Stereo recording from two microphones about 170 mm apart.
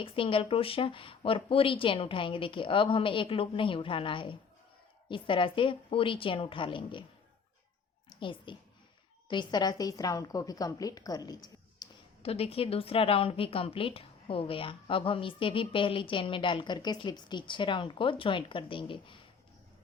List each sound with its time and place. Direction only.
0.0 s a woman's voice: 30° left (ahead or behind)
8.2 s a woman's voice: 30° left (ahead or behind)
12.2 s a woman's voice: 35° left (ahead or behind)